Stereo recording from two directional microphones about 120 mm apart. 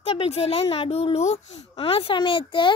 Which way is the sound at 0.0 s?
55° left (ahead or behind).